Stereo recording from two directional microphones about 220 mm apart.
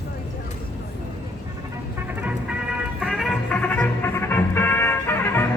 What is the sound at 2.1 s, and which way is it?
Music, 5° right (ahead or behind).